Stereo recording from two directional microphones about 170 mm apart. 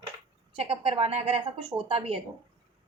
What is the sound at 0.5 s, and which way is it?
A woman's voice, 35° right (ahead or behind).